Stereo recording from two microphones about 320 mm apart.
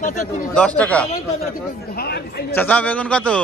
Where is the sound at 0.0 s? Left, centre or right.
Left.